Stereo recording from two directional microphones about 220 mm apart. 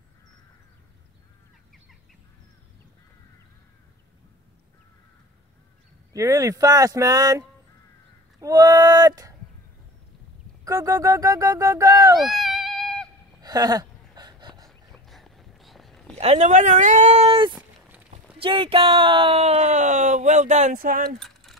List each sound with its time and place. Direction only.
6.1 s speech: 15° right (ahead or behind)
10.6 s speech: 15° right (ahead or behind)
12.2 s cat: centre (ahead or behind)
13.4 s a sound: 15° right (ahead or behind)
14.7 s a sound: centre (ahead or behind)
16.2 s speech: 30° right (ahead or behind)
21.2 s mechanisms: centre (ahead or behind)